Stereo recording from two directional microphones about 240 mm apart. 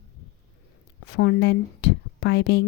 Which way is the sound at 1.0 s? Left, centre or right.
Left.